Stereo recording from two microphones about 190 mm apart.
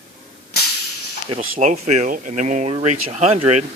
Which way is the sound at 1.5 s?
40° right (ahead or behind).